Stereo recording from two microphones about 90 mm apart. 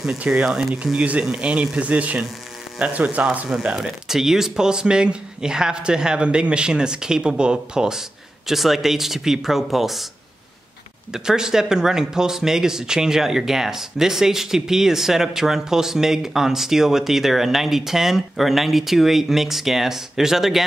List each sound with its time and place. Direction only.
0.3 s speech: 5° right (ahead or behind)
3.4 s speech: 5° right (ahead or behind)
11.1 s speech: 5° right (ahead or behind)